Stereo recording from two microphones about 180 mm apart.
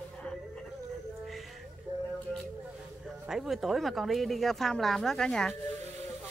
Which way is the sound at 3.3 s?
Centre (ahead or behind).